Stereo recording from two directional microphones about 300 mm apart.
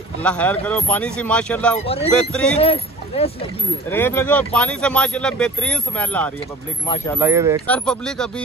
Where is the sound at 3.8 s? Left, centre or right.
Centre.